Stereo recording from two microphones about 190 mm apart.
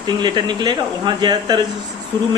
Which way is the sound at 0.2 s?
25° right (ahead or behind).